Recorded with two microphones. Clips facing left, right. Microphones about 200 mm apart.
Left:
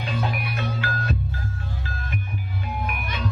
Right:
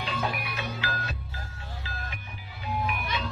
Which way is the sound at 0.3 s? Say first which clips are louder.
Left 5 dB; 50° left (ahead or behind).